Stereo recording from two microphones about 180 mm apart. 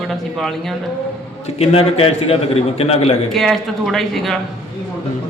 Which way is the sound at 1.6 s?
35° left (ahead or behind).